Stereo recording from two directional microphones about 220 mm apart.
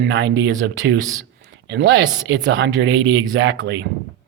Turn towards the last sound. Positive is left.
turn(degrees=-55)  # may be behind; listen again after turning